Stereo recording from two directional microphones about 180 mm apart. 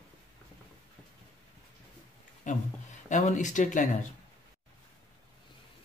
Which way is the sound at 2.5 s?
45° left (ahead or behind).